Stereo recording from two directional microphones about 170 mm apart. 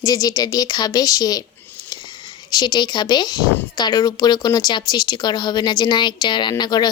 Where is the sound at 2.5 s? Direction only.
25° left (ahead or behind).